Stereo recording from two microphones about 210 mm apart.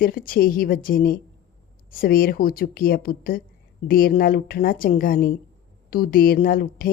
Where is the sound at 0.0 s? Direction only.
45° left (ahead or behind).